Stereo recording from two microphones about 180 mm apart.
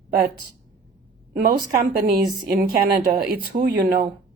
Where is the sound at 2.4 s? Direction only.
55° right (ahead or behind).